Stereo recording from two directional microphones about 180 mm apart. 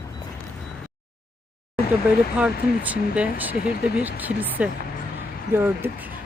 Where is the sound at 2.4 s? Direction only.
5° right (ahead or behind).